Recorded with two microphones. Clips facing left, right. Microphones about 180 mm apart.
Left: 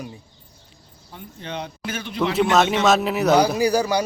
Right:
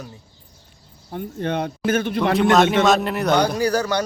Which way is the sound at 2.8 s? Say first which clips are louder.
Even; centre (ahead or behind).